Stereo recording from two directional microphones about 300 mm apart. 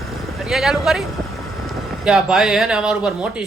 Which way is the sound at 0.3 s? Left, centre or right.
Centre.